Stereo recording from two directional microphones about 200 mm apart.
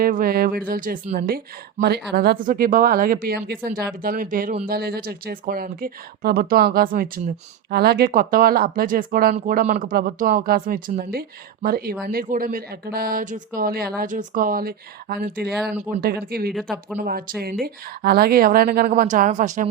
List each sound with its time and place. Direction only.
0.0 s speech: 45° right (ahead or behind)
1.0 s a woman's voice: 35° right (ahead or behind)
1.8 s speech: 55° right (ahead or behind); by 19.6 s 40° right (ahead or behind)